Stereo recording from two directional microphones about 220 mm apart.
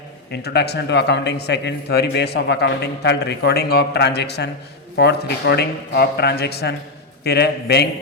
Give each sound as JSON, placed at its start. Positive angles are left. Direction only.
{"t": 0.3, "sound": "a man's voice", "side_deg": 50}